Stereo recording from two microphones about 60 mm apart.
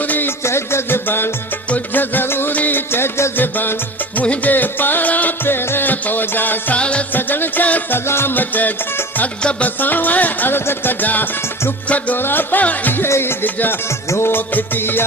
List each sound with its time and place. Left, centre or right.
0.0 s a sound: left
0.3 s music: left
3.3 s music: left
5.5 s music: left
6.7 s music: centre
7.1 s music: left
8.0 s music: left
13.1 s music: left
13.4 s music: left
14.1 s music: left
14.3 s music: left